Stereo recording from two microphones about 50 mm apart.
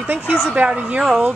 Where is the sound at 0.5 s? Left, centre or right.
Right.